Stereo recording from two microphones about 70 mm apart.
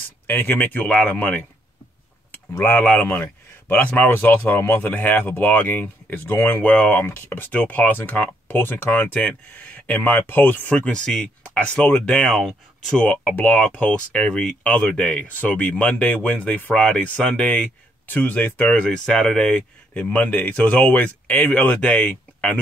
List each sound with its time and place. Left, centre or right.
0.3 s speech: left
2.5 s speech: left
9.2 s speech: centre
10.8 s speech: centre
13.0 s speech: left
19.4 s speech: centre